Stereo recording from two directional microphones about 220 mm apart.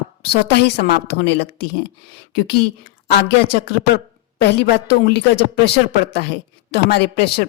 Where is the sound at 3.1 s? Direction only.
45° left (ahead or behind).